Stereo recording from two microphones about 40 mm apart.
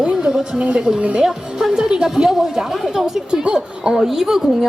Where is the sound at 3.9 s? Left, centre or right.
Centre.